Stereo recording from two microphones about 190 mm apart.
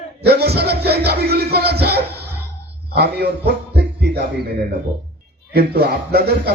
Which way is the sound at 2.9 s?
55° right (ahead or behind).